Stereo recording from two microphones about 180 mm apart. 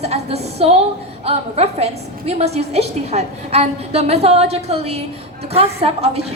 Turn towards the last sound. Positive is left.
turn(degrees=-35)  # may be behind; listen again after turning